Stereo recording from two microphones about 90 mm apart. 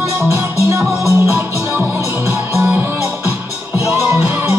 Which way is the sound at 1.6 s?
25° right (ahead or behind).